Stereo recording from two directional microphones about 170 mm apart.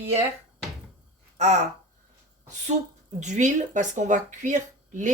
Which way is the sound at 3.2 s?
45° right (ahead or behind).